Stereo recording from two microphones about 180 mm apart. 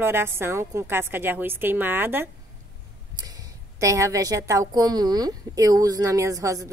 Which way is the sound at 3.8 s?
15° right (ahead or behind).